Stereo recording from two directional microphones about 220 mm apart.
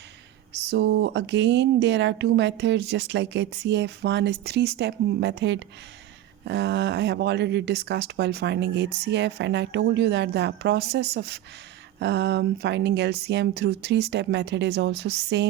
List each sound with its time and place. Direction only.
0.7 s speech: 50° right (ahead or behind)